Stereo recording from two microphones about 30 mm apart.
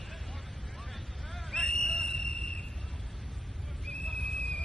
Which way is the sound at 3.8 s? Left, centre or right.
Centre.